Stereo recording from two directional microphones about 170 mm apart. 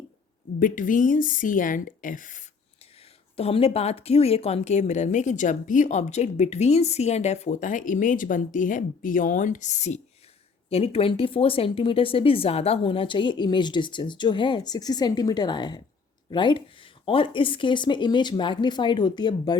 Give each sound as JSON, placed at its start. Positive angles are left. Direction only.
{"t": 0.6, "sound": "speech", "side_deg": 50}
{"t": 3.3, "sound": "speech", "side_deg": 35}